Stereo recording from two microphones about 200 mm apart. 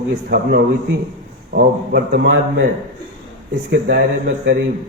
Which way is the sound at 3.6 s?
60° right (ahead or behind).